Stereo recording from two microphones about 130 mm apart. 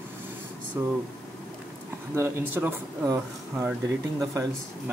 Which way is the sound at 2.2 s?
20° right (ahead or behind).